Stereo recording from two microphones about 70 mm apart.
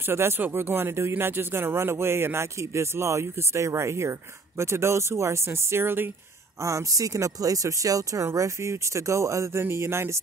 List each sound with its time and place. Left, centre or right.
0.1 s speech: right
6.6 s speech: right